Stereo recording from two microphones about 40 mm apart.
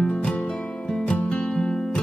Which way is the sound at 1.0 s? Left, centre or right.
Left.